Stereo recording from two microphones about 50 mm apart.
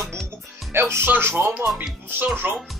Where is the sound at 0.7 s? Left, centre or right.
Right.